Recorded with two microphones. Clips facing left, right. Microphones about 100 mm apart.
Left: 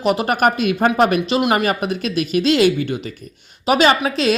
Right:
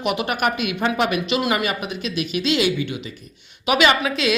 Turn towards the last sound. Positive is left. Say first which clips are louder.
# left 3 dB
turn(degrees=35)  # may be behind; listen again after turning